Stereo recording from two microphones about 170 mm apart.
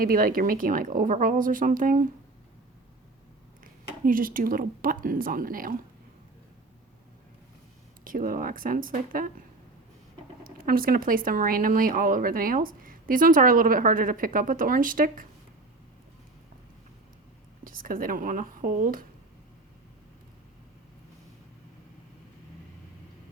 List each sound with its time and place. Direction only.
0.0 s speech: 55° right (ahead or behind)
4.0 s speech: 55° right (ahead or behind)
8.0 s speech: 55° right (ahead or behind)
10.4 s speech: 60° right (ahead or behind)
17.6 s speech: 55° right (ahead or behind)